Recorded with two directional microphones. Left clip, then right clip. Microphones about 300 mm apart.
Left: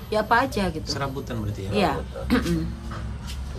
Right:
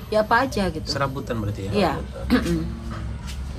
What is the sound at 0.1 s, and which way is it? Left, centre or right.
A woman's voice, centre.